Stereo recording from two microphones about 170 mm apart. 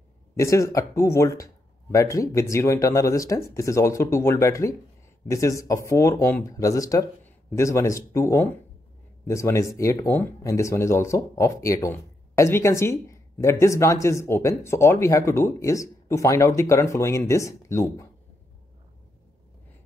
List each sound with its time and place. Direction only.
0.4 s speech: 15° left (ahead or behind)